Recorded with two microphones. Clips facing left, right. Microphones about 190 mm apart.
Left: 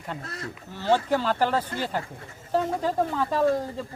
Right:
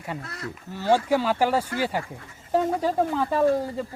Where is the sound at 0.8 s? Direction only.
10° right (ahead or behind).